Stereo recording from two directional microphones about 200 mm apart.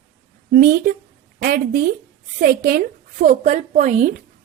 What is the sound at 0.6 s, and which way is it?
A woman's voice, 45° right (ahead or behind).